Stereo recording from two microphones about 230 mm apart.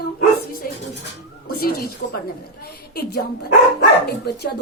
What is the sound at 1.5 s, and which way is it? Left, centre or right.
Speech, left.